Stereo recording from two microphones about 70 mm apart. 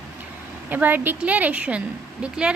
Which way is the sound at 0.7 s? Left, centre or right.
Right.